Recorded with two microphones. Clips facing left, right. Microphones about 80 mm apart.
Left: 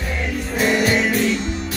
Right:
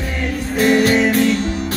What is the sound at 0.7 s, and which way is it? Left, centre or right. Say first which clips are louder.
Music: right 4 dB; right.